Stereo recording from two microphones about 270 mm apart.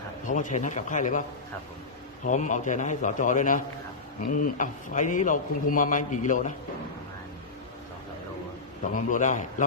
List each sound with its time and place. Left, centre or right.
0.3 s a man's voice: left
2.2 s a man's voice: left
8.9 s a man's voice: left